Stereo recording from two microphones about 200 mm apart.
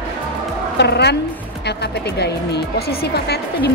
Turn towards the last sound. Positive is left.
turn(degrees=55)  # may be behind; listen again after turning